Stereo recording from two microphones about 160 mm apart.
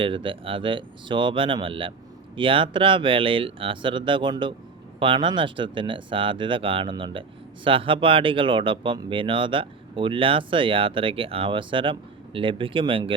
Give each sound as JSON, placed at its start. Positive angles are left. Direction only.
{"t": 0.0, "sound": "speech", "side_deg": -35}